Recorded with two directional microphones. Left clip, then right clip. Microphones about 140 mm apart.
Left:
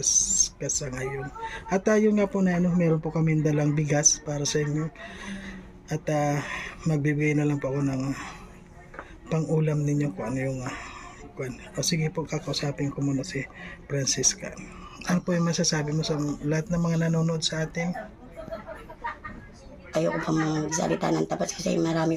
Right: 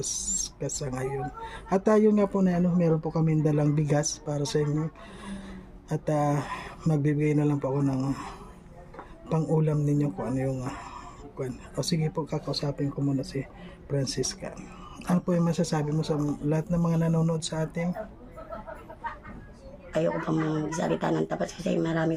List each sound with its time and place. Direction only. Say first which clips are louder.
0.0 s speech: left 8 dB; 10° right (ahead or behind)
3.3 s speech: even; 10° right (ahead or behind)
19.9 s speech: left 1 dB; 10° right (ahead or behind)